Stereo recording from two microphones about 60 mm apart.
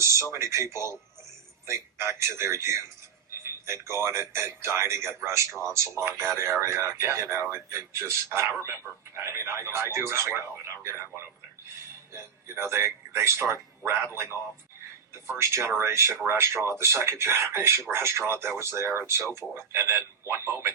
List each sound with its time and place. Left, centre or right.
0.0 s speech: right
12.1 s speech: right
15.3 s speech: right